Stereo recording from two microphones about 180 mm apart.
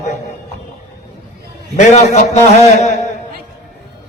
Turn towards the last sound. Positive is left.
turn(degrees=40)  # may be behind; listen again after turning